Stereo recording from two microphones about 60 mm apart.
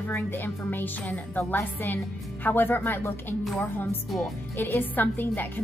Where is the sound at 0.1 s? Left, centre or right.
Left.